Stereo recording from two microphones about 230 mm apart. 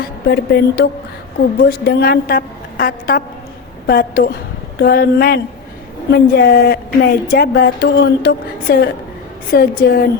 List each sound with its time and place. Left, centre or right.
0.0 s a woman's voice: left